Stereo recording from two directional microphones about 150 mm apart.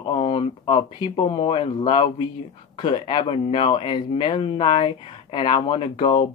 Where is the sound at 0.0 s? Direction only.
40° left (ahead or behind).